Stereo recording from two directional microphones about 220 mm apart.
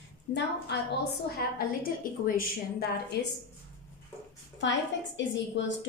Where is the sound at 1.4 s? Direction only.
45° left (ahead or behind).